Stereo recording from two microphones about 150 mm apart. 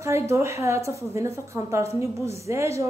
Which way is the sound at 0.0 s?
20° right (ahead or behind).